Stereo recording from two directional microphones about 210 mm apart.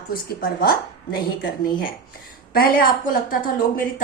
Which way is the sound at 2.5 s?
45° left (ahead or behind).